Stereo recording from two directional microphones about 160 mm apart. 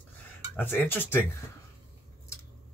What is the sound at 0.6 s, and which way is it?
Speech, 15° left (ahead or behind).